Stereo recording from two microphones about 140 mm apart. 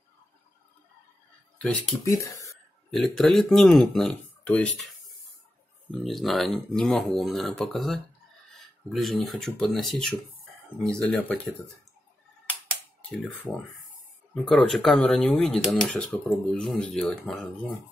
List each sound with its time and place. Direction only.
2.0 s speech: 20° left (ahead or behind)
2.9 s speech: centre (ahead or behind)
5.9 s speech: centre (ahead or behind)
13.5 s speech: centre (ahead or behind)